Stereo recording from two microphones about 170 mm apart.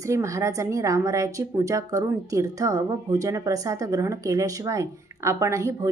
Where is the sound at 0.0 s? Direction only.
20° right (ahead or behind).